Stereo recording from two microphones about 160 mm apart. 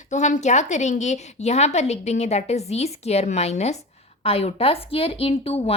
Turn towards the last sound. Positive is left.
turn(degrees=40)  # may be behind; listen again after turning